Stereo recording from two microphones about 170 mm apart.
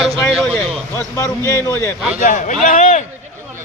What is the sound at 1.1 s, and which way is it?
Speech, 15° left (ahead or behind).